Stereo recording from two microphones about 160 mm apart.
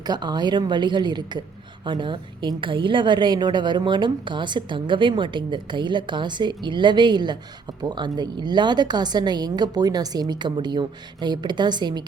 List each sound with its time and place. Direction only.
0.1 s a woman's voice: 25° right (ahead or behind)